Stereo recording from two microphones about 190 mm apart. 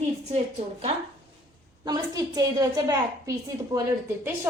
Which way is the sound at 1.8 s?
20° right (ahead or behind).